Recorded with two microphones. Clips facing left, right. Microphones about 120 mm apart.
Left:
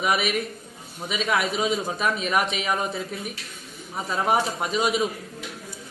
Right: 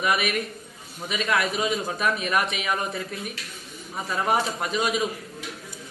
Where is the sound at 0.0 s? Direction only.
15° left (ahead or behind).